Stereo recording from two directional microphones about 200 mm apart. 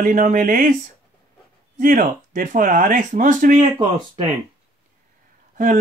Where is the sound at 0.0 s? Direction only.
40° right (ahead or behind).